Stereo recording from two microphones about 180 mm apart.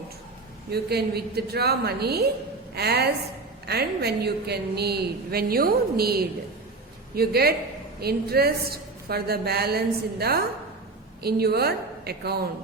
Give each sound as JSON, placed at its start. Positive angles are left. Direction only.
{"t": 0.7, "sound": "a woman's voice", "side_deg": -60}